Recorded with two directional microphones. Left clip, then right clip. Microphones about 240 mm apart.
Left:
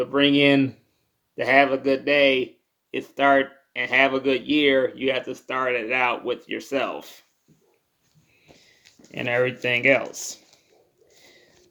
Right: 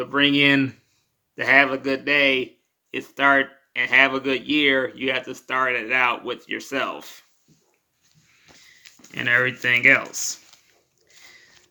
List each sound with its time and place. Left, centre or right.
0.2 s speech: centre
9.1 s speech: right
9.7 s speech: centre